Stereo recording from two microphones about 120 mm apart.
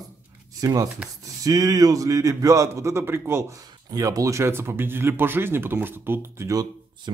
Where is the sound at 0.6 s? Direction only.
30° right (ahead or behind).